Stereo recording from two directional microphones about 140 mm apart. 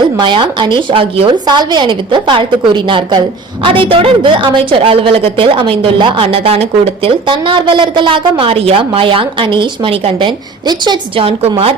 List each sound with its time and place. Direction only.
0.2 s a woman's voice: 35° right (ahead or behind)
11.3 s a woman's voice: 45° right (ahead or behind)